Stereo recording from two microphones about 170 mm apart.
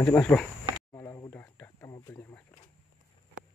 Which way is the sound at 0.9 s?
20° left (ahead or behind).